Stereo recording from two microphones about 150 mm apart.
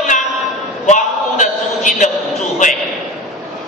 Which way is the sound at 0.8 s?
55° left (ahead or behind).